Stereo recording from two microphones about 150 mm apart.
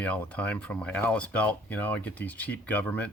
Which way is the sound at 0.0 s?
10° left (ahead or behind).